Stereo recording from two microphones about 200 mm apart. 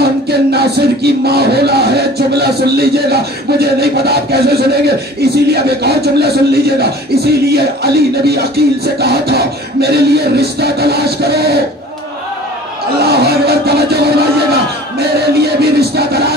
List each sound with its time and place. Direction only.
0.0 s music: 55° right (ahead or behind)
13.0 s music: 50° right (ahead or behind)